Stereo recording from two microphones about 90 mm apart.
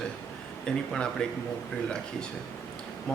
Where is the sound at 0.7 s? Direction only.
10° left (ahead or behind).